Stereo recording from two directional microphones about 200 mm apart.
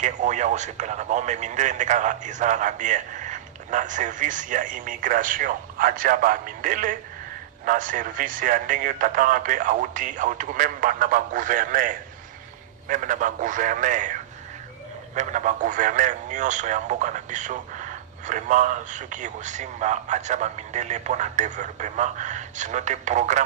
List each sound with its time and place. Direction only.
0.0 s speech: 40° right (ahead or behind)
15.1 s speech: 40° right (ahead or behind)